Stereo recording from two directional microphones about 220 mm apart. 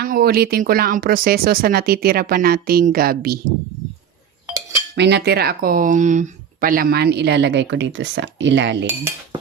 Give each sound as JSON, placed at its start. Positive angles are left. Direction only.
{"t": 0.0, "sound": "speech", "side_deg": -45}
{"t": 4.9, "sound": "speech", "side_deg": -50}